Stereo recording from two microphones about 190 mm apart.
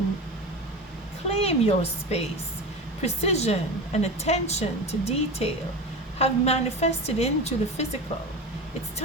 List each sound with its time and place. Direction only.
1.3 s a woman's voice: 30° left (ahead or behind)